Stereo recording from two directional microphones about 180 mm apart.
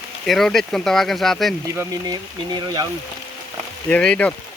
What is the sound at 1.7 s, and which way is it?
Speech, 20° right (ahead or behind).